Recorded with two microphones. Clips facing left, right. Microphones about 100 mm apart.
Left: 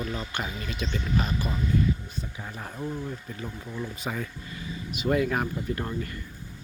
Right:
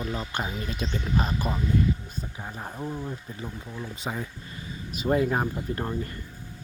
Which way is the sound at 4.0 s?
20° right (ahead or behind).